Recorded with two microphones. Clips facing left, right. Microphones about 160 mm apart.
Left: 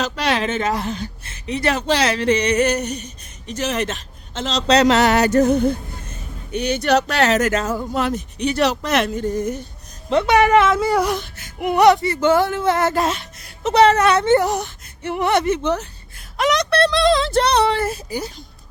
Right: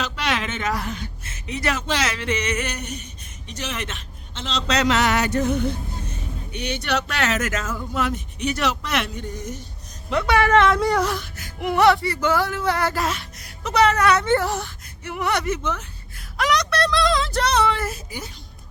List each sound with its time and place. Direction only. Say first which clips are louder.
0.0 s speech: left 5 dB; 35° left (ahead or behind); by 9.6 s 55° left (ahead or behind)
10.1 s speech: left 4 dB; 25° left (ahead or behind)
10.6 s speech: left 2 dB; centre (ahead or behind)
11.2 s speech: left 3 dB; 25° left (ahead or behind)
16.4 s a sound: left 4 dB; 25° left (ahead or behind)